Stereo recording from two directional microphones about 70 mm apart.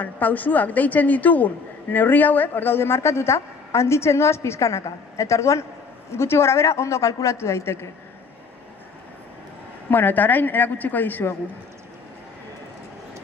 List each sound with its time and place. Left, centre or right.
0.0 s a woman's voice: left
9.8 s a woman's voice: left